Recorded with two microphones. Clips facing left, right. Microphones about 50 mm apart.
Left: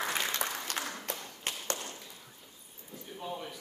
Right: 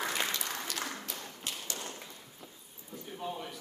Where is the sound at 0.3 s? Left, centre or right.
Left.